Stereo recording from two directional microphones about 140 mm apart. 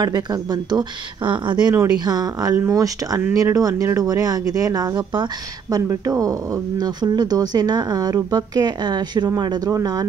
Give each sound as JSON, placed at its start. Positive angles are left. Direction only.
{"t": 0.0, "sound": "speech", "side_deg": -30}